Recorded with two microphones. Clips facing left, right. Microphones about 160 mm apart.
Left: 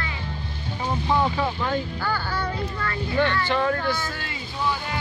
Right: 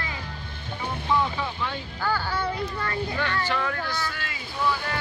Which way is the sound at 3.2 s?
30° left (ahead or behind).